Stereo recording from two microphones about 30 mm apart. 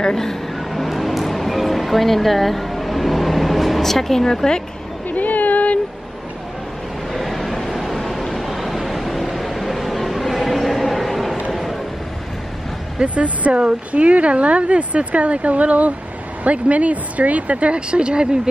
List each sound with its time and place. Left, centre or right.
0.1 s vehicle: centre
0.8 s music: centre
3.8 s speech: centre
5.1 s a sound: left
7.2 s vehicle: centre
13.0 s speech: right
17.7 s speech: right